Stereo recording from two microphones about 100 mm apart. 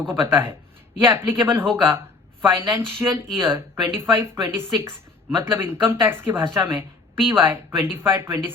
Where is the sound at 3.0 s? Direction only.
15° right (ahead or behind).